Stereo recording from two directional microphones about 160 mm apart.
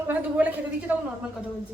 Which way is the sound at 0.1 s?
10° right (ahead or behind).